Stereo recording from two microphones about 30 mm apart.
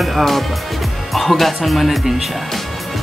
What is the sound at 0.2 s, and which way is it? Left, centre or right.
Speech, centre.